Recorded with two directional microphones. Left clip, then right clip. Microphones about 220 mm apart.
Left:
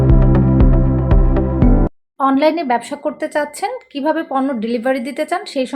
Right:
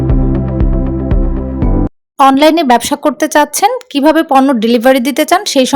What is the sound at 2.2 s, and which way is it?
Speech, 55° right (ahead or behind).